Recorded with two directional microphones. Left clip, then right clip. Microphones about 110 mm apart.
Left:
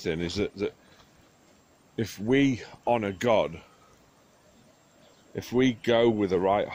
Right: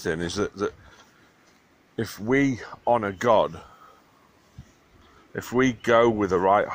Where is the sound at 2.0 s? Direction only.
25° left (ahead or behind).